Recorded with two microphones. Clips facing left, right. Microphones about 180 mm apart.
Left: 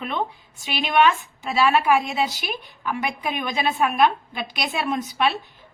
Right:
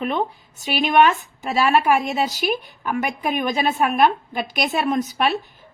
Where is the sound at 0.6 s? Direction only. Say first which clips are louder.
Right 3 dB; 45° right (ahead or behind).